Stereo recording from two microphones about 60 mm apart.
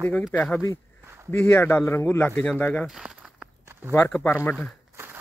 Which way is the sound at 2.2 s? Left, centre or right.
Left.